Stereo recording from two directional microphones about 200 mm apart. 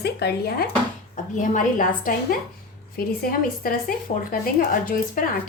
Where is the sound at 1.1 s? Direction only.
40° left (ahead or behind).